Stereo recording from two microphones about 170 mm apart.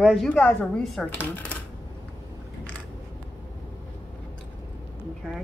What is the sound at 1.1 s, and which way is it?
Speech, 10° left (ahead or behind).